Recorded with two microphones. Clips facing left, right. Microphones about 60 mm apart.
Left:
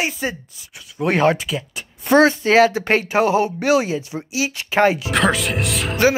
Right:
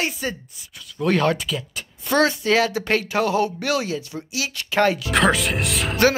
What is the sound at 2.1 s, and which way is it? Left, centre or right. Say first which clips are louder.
Speech: left 5 dB; left.